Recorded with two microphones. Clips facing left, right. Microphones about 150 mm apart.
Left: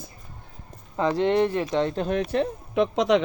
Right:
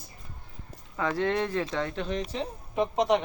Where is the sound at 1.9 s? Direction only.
55° left (ahead or behind); by 3.2 s 90° left.